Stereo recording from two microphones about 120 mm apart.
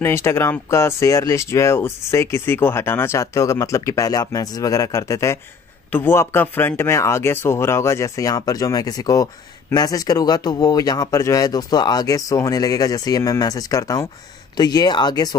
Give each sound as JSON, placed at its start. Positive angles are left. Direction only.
{"t": 0.0, "sound": "speech", "side_deg": 20}